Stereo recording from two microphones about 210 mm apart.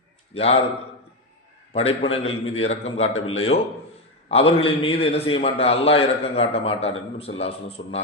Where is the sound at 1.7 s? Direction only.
30° left (ahead or behind).